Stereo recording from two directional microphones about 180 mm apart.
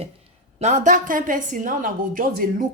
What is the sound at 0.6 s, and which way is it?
A woman's voice, 40° right (ahead or behind).